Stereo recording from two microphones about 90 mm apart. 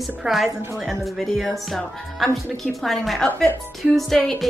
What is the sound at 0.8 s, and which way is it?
Music, centre (ahead or behind).